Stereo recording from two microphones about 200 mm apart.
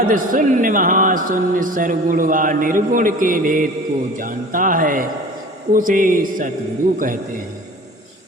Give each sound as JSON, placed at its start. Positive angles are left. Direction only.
{"t": 0.0, "sound": "speech", "side_deg": -45}